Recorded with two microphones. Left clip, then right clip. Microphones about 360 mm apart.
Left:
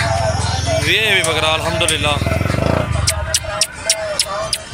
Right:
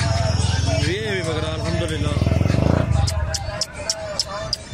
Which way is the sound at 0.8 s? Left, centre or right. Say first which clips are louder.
Left 10 dB; left.